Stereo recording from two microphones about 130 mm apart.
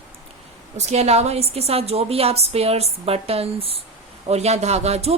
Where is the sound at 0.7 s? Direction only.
55° right (ahead or behind).